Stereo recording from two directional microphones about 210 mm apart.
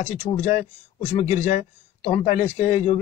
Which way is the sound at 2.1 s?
30° left (ahead or behind).